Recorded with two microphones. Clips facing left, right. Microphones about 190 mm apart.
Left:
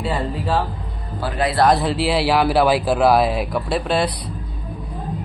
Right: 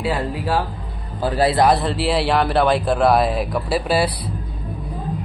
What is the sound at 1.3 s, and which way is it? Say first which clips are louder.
Speech: right 4 dB; 30° right (ahead or behind).